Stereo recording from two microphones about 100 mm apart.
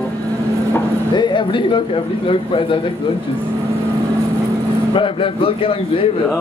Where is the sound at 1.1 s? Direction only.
50° left (ahead or behind).